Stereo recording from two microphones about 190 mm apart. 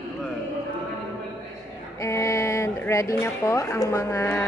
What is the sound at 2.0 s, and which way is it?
A woman's voice, 15° left (ahead or behind).